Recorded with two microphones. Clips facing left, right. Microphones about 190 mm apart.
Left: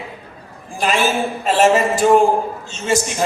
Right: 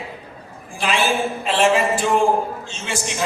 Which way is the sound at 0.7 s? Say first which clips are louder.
Left 2 dB; 45° left (ahead or behind).